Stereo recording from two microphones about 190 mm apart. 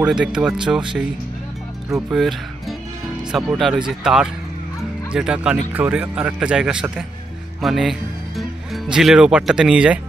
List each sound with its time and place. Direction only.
0.0 s speech: 5° right (ahead or behind)
3.3 s speech: centre (ahead or behind)